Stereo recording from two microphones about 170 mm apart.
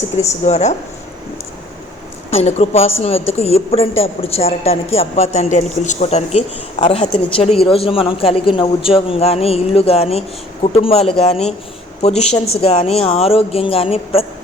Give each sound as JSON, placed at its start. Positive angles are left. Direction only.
{"t": 0.2, "sound": "speech", "side_deg": 40}
{"t": 2.3, "sound": "speech", "side_deg": 40}
{"t": 6.7, "sound": "speech", "side_deg": 30}